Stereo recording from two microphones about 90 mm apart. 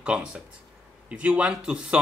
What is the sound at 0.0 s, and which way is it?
A man's voice, 10° right (ahead or behind).